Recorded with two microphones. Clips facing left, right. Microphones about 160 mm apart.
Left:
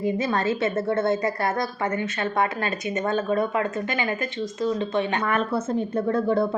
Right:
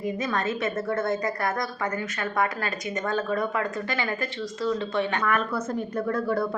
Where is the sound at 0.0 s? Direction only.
30° left (ahead or behind).